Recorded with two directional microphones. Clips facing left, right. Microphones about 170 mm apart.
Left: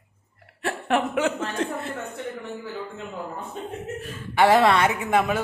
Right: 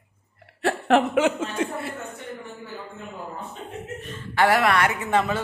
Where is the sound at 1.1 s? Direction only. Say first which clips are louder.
Right 3 dB; 10° right (ahead or behind).